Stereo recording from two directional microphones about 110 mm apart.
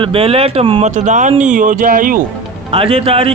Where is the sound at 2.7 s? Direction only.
60° right (ahead or behind).